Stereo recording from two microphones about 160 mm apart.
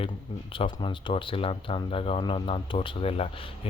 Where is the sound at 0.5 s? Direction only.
30° left (ahead or behind).